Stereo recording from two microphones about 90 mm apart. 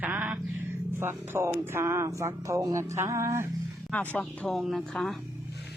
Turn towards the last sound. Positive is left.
turn(degrees=5)  # may be behind; listen again after turning